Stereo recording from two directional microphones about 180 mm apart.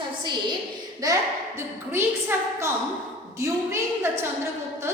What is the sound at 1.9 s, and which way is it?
A woman's voice, 15° right (ahead or behind).